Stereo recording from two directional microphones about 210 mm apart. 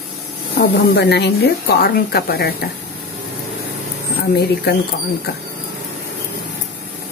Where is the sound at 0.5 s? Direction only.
50° left (ahead or behind).